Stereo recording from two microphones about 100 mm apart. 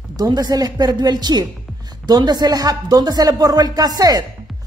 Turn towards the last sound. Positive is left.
turn(degrees=-40)  # may be behind; listen again after turning